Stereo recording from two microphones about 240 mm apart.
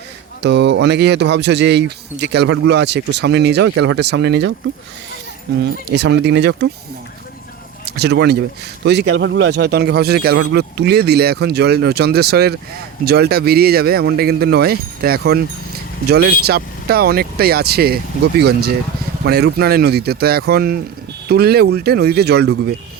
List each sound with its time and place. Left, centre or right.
0.4 s speech: right
5.9 s speech: right
7.9 s speech: right